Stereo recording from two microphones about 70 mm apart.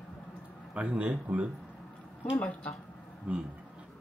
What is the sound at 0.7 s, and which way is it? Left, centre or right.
Speech, centre.